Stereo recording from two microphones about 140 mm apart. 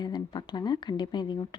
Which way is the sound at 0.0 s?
30° left (ahead or behind).